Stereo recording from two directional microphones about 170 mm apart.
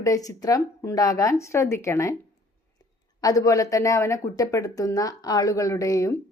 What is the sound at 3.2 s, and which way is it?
Speech, 20° left (ahead or behind).